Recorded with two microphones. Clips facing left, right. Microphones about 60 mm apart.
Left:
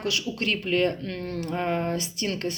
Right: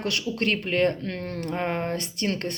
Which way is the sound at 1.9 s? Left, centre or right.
Right.